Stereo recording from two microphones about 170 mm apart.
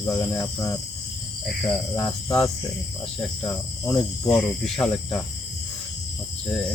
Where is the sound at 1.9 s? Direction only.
20° left (ahead or behind).